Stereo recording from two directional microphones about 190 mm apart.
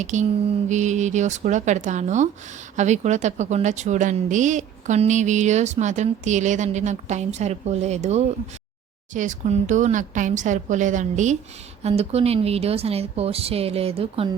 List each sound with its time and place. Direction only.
0.0 s a woman's voice: 40° right (ahead or behind)